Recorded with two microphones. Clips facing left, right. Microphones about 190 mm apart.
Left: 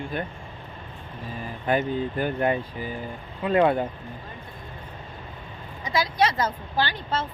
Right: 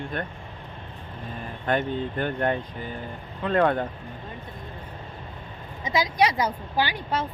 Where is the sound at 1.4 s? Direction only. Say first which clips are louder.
Left 1 dB; 5° left (ahead or behind).